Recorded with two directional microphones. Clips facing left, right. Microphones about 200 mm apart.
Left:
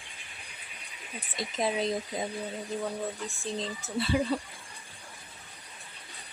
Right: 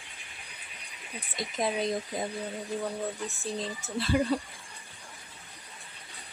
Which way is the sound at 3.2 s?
Centre (ahead or behind).